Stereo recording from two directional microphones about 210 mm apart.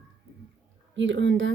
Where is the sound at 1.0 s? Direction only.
60° right (ahead or behind).